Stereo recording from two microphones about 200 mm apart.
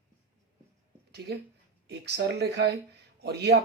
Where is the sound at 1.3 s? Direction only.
50° right (ahead or behind).